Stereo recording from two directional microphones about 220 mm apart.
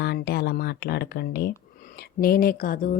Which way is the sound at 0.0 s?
50° left (ahead or behind).